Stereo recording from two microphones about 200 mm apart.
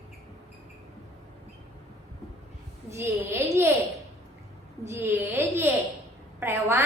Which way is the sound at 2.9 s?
15° right (ahead or behind).